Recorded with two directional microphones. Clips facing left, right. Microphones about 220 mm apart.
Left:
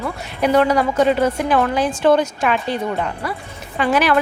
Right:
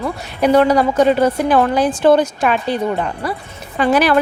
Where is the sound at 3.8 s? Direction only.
35° right (ahead or behind).